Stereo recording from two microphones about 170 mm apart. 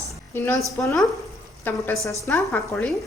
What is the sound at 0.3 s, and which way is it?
A woman's voice, 10° left (ahead or behind).